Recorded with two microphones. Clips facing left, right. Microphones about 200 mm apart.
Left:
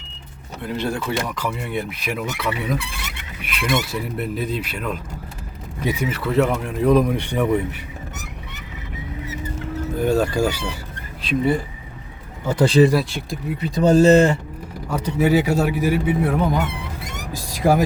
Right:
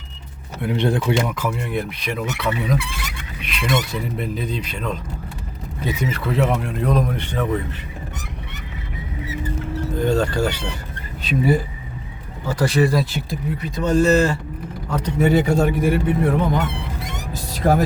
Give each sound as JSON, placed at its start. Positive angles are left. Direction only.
{"t": 0.6, "sound": "speech", "side_deg": -15}
{"t": 1.4, "sound": "speech", "side_deg": 0}
{"t": 10.0, "sound": "speech", "side_deg": 10}
{"t": 12.5, "sound": "speech", "side_deg": 25}
{"t": 12.9, "sound": "speech", "side_deg": 0}
{"t": 13.6, "sound": "speech", "side_deg": 35}
{"t": 14.8, "sound": "speech", "side_deg": 10}